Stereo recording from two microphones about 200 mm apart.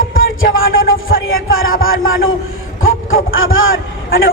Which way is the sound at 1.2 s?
90° left.